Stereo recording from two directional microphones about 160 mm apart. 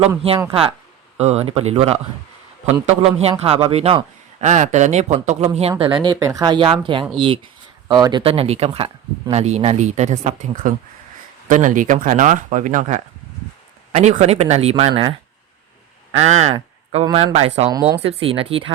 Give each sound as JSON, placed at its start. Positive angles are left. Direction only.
{"t": 0.2, "sound": "speech", "side_deg": -35}
{"t": 3.0, "sound": "a man's voice", "side_deg": -40}
{"t": 5.8, "sound": "a man's voice", "side_deg": -30}
{"t": 16.1, "sound": "a man's voice", "side_deg": -45}
{"t": 17.7, "sound": "speech", "side_deg": -25}
{"t": 18.0, "sound": "speech", "side_deg": -35}